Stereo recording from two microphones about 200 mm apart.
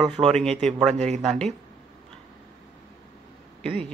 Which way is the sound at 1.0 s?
35° right (ahead or behind).